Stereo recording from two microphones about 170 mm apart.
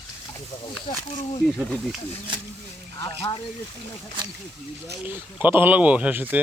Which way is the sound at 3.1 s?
30° left (ahead or behind).